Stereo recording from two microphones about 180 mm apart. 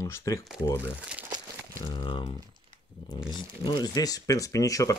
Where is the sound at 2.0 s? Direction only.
25° left (ahead or behind).